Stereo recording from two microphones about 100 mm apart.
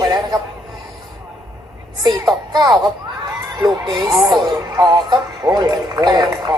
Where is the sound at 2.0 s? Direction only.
40° right (ahead or behind).